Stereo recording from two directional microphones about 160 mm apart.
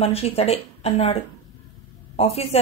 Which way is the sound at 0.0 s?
40° left (ahead or behind).